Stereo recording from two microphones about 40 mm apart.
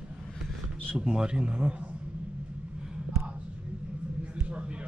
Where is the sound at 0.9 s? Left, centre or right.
Centre.